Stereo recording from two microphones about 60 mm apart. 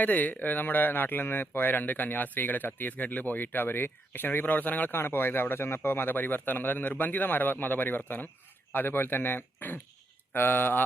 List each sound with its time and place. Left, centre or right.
0.0 s speech: left